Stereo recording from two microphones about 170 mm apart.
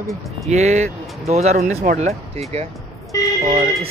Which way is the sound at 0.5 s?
40° right (ahead or behind).